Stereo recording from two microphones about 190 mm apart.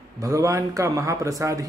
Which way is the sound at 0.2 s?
15° right (ahead or behind).